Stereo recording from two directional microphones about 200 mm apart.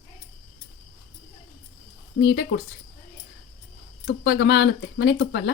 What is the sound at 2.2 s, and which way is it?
Speech, 55° left (ahead or behind).